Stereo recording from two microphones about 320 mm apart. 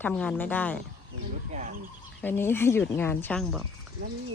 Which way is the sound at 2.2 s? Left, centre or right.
Centre.